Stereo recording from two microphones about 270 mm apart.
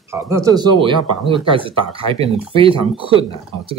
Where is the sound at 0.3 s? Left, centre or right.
Centre.